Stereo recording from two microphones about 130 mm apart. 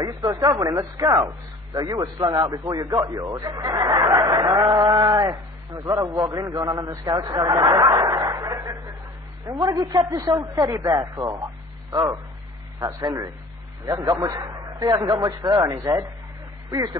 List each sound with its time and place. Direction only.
0.0 s speech: 30° right (ahead or behind)
4.2 s sheep: 25° right (ahead or behind)
6.1 s speech: 25° right (ahead or behind)